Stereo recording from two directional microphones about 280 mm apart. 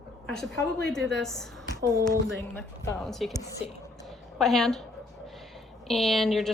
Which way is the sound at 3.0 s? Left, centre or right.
Centre.